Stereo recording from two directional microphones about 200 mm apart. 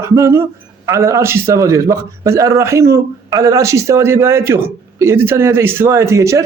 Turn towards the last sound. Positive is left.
turn(degrees=-15)  # may be behind; listen again after turning